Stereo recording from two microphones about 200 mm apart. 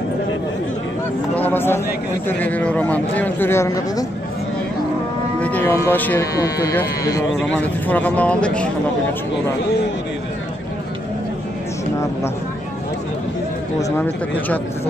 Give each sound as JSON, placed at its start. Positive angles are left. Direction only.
{"t": 1.3, "sound": "speech", "side_deg": 10}
{"t": 5.4, "sound": "a man's voice", "side_deg": 10}
{"t": 13.9, "sound": "speech", "side_deg": 10}